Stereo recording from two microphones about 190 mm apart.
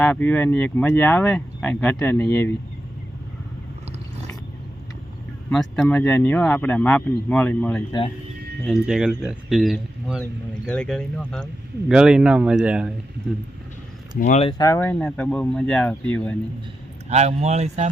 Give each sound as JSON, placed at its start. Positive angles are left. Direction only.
{"t": 0.0, "sound": "speech", "side_deg": 10}
{"t": 5.5, "sound": "speech", "side_deg": 5}
{"t": 14.2, "sound": "speech", "side_deg": 40}
{"t": 14.6, "sound": "speech", "side_deg": 15}
{"t": 17.1, "sound": "speech", "side_deg": -35}